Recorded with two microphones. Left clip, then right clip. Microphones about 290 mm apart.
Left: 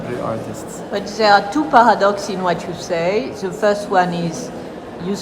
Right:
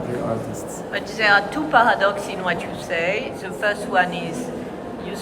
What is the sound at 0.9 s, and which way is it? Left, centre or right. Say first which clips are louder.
A woman's voice: left 4 dB; centre.